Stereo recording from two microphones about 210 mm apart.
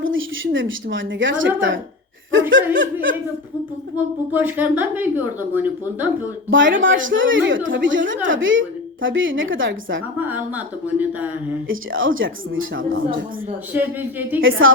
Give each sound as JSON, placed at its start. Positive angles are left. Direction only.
{"t": 0.0, "sound": "a woman's voice", "side_deg": -65}
{"t": 4.3, "sound": "speech", "side_deg": -10}
{"t": 6.5, "sound": "a woman's voice", "side_deg": -60}
{"t": 10.2, "sound": "speech", "side_deg": -10}
{"t": 11.7, "sound": "a woman's voice", "side_deg": -70}
{"t": 13.7, "sound": "speech", "side_deg": -10}
{"t": 14.6, "sound": "a woman's voice", "side_deg": -70}